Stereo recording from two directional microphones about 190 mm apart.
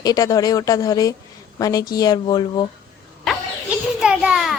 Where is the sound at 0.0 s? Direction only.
20° left (ahead or behind).